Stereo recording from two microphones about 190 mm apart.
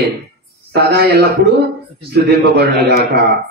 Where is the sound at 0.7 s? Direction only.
60° right (ahead or behind).